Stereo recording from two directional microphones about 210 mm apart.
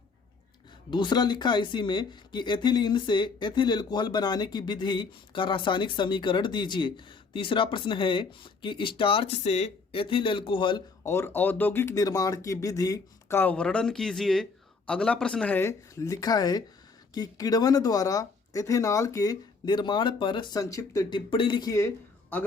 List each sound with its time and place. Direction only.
0.9 s speech: 20° left (ahead or behind)